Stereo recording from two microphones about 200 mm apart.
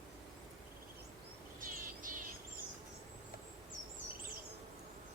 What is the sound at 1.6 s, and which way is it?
Bird, 45° right (ahead or behind).